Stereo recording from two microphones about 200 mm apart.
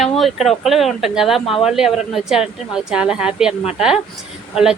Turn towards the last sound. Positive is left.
turn(degrees=0)  # may be behind; listen again after turning